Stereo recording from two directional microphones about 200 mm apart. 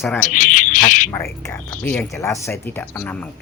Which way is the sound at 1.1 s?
15° left (ahead or behind).